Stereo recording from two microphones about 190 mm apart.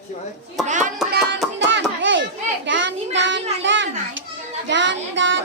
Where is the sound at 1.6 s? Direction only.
70° right (ahead or behind).